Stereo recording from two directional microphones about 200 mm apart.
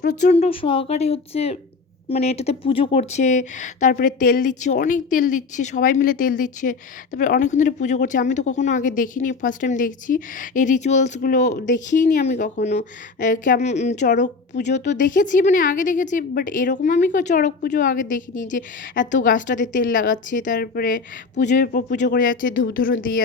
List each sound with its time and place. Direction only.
0.3 s speech: 30° left (ahead or behind); by 23.2 s 45° left (ahead or behind)